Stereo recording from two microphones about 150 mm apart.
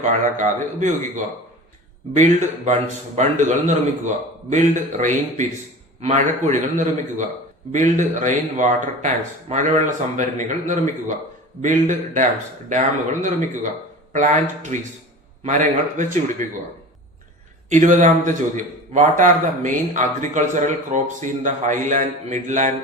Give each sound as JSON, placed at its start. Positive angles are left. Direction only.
{"t": 0.0, "sound": "a man's voice", "side_deg": -55}
{"t": 14.1, "sound": "a man's voice", "side_deg": -55}
{"t": 17.7, "sound": "a man's voice", "side_deg": -55}